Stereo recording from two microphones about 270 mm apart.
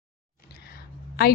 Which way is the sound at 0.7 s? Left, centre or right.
Left.